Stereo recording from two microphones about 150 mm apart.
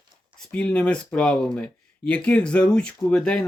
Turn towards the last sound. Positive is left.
turn(degrees=5)  # may be behind; listen again after turning